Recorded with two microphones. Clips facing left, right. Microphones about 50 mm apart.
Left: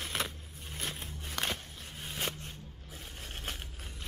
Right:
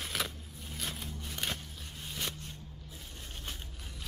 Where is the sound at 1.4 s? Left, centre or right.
Left.